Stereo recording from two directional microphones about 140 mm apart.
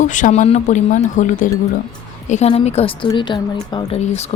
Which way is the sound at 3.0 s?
35° left (ahead or behind).